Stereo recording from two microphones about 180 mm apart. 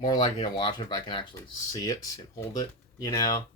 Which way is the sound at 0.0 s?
25° left (ahead or behind).